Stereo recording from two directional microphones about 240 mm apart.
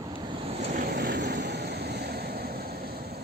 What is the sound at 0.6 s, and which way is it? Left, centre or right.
Vehicle, right.